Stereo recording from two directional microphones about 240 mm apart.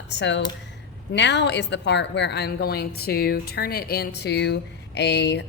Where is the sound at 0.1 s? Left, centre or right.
Left.